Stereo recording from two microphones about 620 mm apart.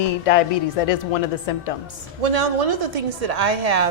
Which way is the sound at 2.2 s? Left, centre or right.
Right.